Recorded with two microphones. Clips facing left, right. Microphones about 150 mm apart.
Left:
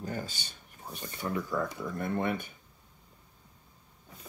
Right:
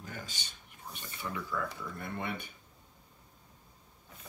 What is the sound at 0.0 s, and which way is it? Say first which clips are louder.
Speech: left 8 dB; 35° left (ahead or behind).